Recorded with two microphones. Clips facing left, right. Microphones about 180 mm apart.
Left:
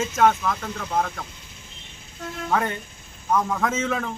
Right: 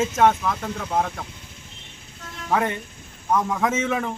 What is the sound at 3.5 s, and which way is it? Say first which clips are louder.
Speech: right 1 dB; 15° right (ahead or behind).